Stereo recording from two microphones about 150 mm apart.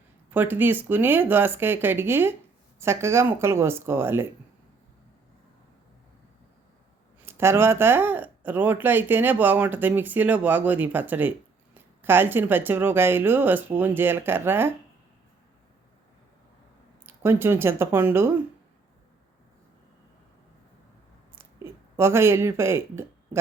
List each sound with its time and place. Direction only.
0.3 s speech: 15° right (ahead or behind)
7.3 s speech: 15° right (ahead or behind)
17.1 s speech: 15° right (ahead or behind)
21.3 s a sound: 15° right (ahead or behind)